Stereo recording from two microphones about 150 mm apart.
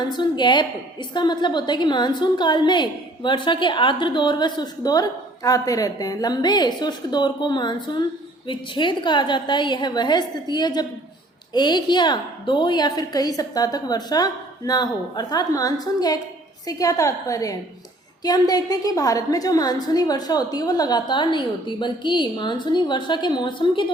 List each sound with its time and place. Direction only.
0.0 s a woman's voice: 30° left (ahead or behind)